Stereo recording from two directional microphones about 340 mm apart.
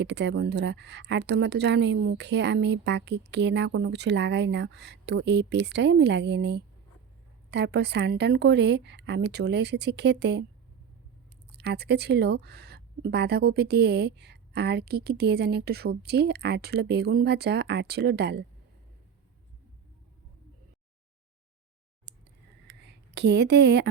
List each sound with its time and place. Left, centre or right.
0.0 s a woman's voice: right
11.5 s speech: right
22.1 s scissors: right
22.6 s a sound: right